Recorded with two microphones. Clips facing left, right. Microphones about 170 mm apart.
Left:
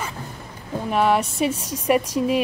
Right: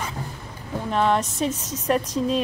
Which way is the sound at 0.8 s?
10° left (ahead or behind).